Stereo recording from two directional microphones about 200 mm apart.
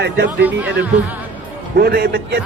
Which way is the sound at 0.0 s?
60° right (ahead or behind).